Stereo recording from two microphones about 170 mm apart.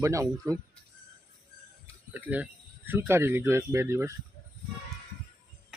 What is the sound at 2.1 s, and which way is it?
Speech, 10° right (ahead or behind).